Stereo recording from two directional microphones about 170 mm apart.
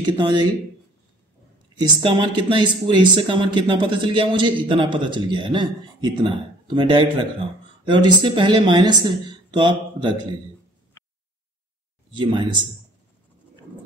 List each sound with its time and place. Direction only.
0.0 s speech: 25° right (ahead or behind)
1.8 s speech: 25° right (ahead or behind)
12.1 s speech: 30° right (ahead or behind)